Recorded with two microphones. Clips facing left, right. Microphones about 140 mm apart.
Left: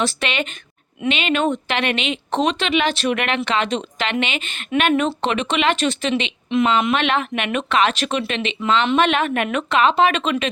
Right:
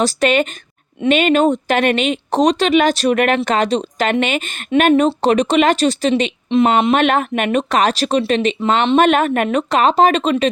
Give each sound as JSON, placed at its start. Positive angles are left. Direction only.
{"t": 0.0, "sound": "speech", "side_deg": -40}